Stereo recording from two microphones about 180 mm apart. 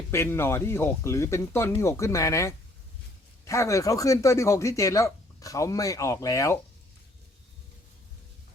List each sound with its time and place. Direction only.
0.1 s speech: 15° left (ahead or behind)